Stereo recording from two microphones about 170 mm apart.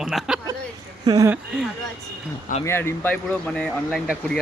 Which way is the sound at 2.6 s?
15° left (ahead or behind).